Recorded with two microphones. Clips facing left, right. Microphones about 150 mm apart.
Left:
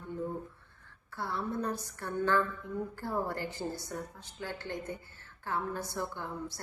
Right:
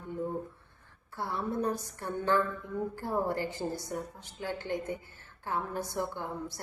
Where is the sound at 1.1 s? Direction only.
20° right (ahead or behind).